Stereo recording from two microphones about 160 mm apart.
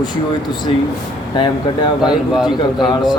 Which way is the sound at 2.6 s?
30° left (ahead or behind).